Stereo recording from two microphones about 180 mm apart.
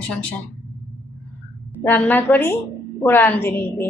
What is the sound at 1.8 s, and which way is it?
A woman's voice, 10° left (ahead or behind).